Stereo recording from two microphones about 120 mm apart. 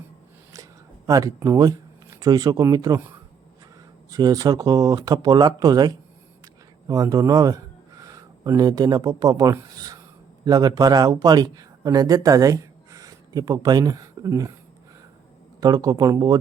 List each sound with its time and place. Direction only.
0.5 s speech: 30° right (ahead or behind)
4.1 s speech: 30° right (ahead or behind)
6.4 s a sound: 30° right (ahead or behind)
10.4 s speech: 35° right (ahead or behind)
15.6 s speech: 35° right (ahead or behind)